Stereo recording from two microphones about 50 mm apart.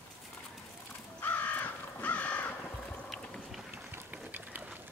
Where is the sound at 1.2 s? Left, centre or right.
Left.